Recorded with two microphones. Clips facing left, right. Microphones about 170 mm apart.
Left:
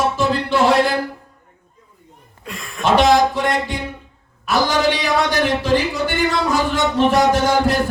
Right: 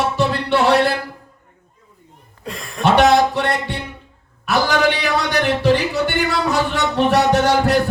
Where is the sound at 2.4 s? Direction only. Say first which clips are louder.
Right 2 dB; 35° right (ahead or behind).